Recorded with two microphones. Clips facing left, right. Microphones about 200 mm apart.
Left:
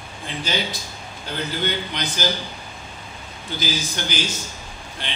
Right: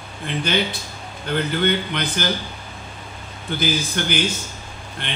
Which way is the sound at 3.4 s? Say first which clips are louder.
Right 4 dB; 55° right (ahead or behind).